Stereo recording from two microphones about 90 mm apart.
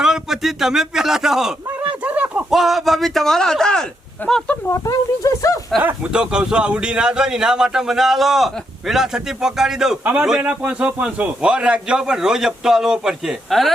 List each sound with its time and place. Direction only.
0.0 s speech: 5° right (ahead or behind)
1.8 s a sound: 15° right (ahead or behind)
2.5 s speech: centre (ahead or behind)
4.2 s speech: 20° left (ahead or behind)
4.7 s speech: 40° left (ahead or behind)
5.8 s speech: 10° right (ahead or behind)
10.0 s a man's voice: 20° right (ahead or behind); by 13.7 s centre (ahead or behind)